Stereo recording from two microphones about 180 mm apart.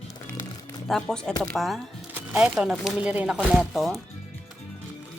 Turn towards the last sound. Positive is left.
turn(degrees=0)  # may be behind; listen again after turning